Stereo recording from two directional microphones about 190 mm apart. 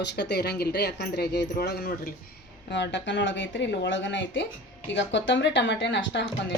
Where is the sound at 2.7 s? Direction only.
70° left (ahead or behind).